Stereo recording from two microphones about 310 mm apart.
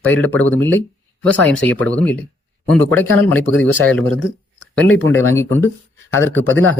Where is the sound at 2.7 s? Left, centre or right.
Right.